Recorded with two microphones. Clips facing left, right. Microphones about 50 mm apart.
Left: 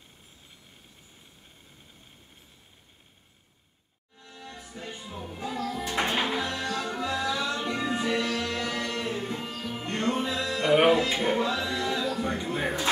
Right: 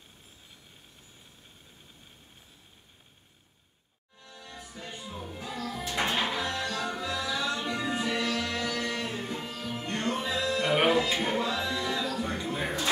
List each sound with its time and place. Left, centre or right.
4.4 s music: centre
6.5 s music: left
10.2 s music: centre